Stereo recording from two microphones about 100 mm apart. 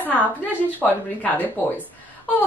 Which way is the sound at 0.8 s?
15° left (ahead or behind).